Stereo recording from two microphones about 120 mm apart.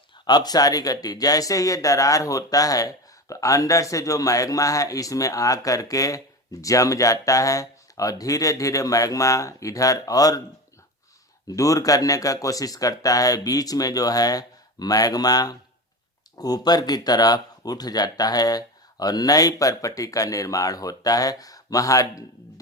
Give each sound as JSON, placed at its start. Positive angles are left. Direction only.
{"t": 0.3, "sound": "speech", "side_deg": 35}
{"t": 11.4, "sound": "speech", "side_deg": 30}